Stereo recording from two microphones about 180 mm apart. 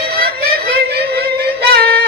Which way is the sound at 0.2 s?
60° right (ahead or behind).